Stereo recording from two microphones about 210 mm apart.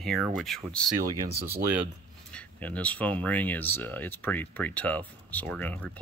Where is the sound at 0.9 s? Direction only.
15° right (ahead or behind).